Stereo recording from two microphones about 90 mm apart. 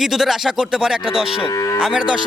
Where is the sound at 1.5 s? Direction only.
40° left (ahead or behind).